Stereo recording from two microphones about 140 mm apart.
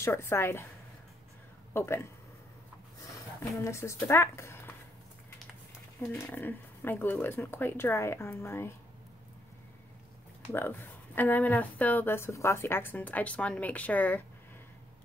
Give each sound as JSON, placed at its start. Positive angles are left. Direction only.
{"t": 0.0, "sound": "speech", "side_deg": 20}
{"t": 1.7, "sound": "speech", "side_deg": 15}
{"t": 3.5, "sound": "speech", "side_deg": 20}
{"t": 5.9, "sound": "speech", "side_deg": 15}
{"t": 10.5, "sound": "speech", "side_deg": 15}